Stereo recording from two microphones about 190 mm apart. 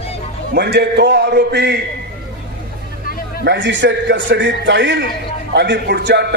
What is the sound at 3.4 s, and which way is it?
A man's voice, 65° right (ahead or behind).